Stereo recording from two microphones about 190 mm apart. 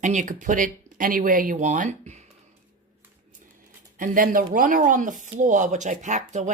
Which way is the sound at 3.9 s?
45° right (ahead or behind).